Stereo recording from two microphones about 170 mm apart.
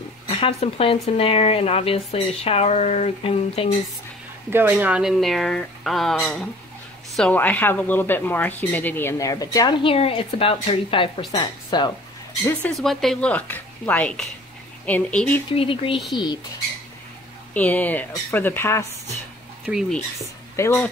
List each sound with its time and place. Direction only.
0.3 s speech: 35° left (ahead or behind)
4.5 s speech: 10° right (ahead or behind); by 11.9 s 30° left (ahead or behind)
12.4 s speech: 5° left (ahead or behind)
15.5 s speech: 30° left (ahead or behind)
17.6 s speech: 10° left (ahead or behind)
19.6 s speech: centre (ahead or behind)
20.5 s speech: 15° left (ahead or behind)